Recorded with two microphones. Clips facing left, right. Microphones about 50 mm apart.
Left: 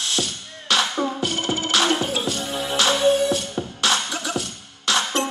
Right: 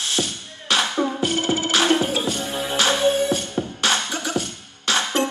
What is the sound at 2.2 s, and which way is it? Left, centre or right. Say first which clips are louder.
Music: right 1 dB; right.